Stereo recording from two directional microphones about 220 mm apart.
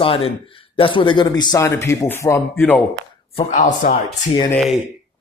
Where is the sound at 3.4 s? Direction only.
30° left (ahead or behind).